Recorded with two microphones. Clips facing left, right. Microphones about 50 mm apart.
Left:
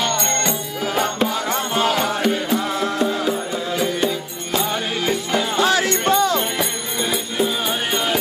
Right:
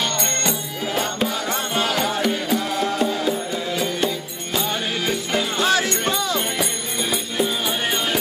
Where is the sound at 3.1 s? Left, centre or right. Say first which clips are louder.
Left 1 dB; left.